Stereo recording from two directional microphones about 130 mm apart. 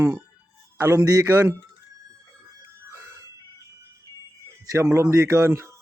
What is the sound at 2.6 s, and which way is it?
Music, 25° right (ahead or behind).